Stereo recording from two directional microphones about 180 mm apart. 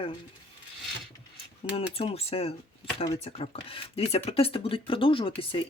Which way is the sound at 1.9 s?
35° left (ahead or behind).